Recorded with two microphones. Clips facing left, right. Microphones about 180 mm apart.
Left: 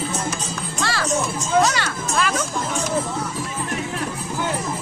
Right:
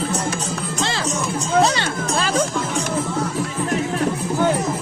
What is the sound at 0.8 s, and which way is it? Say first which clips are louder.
Music: left 2 dB; 20° right (ahead or behind).